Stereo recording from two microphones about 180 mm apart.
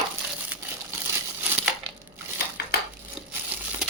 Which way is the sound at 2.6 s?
60° left (ahead or behind).